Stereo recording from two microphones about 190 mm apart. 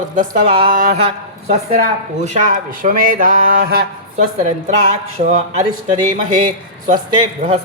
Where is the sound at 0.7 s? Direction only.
45° right (ahead or behind).